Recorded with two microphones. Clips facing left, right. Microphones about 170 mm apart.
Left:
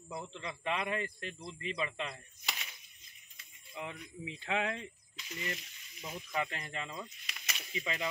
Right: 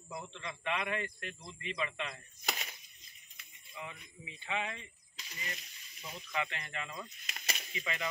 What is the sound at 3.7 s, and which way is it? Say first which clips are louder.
Speech: left 4 dB; 75° left (ahead or behind).